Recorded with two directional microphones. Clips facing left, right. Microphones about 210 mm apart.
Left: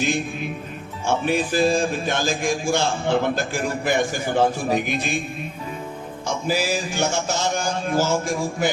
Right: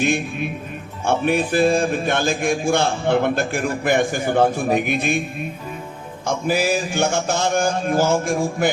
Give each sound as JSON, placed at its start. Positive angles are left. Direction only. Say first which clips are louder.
{"t": 1.0, "sound": "a man's voice", "louder": "right 3 dB", "side_deg": -55}
{"t": 6.2, "sound": "a man's voice", "louder": "right 3 dB", "side_deg": -55}